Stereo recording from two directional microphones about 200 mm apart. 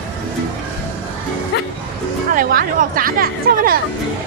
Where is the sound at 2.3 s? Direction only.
45° right (ahead or behind).